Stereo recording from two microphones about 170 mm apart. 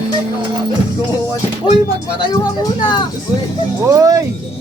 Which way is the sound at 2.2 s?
25° left (ahead or behind).